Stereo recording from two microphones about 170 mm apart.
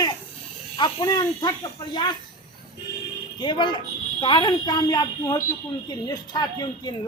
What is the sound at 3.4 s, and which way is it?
Speech, 25° left (ahead or behind).